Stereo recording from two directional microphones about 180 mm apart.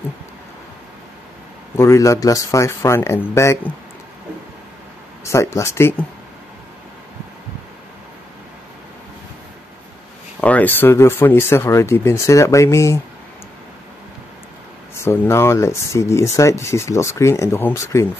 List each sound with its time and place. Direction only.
1.8 s speech: 15° left (ahead or behind)
5.2 s speech: 15° left (ahead or behind)
10.4 s speech: 10° left (ahead or behind)
15.0 s speech: 15° left (ahead or behind)